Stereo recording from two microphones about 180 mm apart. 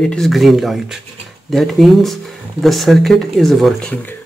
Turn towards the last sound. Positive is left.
turn(degrees=10)  # may be behind; listen again after turning